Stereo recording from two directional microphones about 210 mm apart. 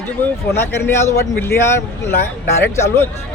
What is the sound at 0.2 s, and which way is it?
A man's voice, 10° left (ahead or behind).